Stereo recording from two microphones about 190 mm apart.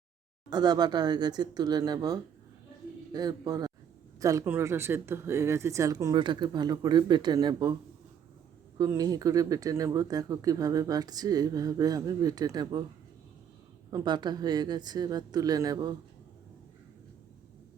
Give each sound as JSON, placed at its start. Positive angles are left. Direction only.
{"t": 0.5, "sound": "speech", "side_deg": -20}
{"t": 8.8, "sound": "speech", "side_deg": -20}
{"t": 13.9, "sound": "speech", "side_deg": -20}